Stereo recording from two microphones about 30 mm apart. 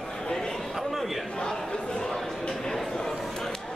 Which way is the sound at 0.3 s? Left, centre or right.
Centre.